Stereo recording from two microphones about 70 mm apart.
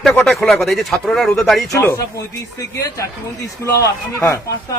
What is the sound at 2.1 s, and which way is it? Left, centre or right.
Speech, left.